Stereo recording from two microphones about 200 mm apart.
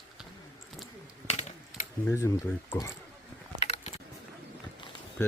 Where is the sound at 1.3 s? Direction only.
35° left (ahead or behind).